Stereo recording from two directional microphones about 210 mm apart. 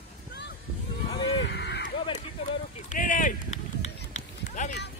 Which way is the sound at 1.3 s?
55° left (ahead or behind).